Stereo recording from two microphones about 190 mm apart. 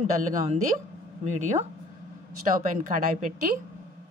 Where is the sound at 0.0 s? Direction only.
40° right (ahead or behind).